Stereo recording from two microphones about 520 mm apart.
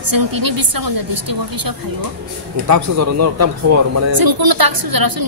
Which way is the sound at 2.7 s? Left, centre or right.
Right.